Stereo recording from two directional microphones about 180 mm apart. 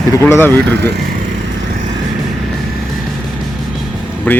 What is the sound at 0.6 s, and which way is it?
Speech, 70° right (ahead or behind).